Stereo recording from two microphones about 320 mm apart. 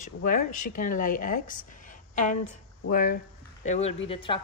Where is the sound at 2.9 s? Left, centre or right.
Left.